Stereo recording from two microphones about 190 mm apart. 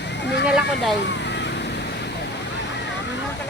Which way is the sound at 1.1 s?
65° left (ahead or behind).